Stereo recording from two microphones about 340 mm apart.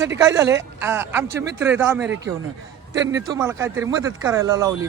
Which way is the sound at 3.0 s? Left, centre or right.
Right.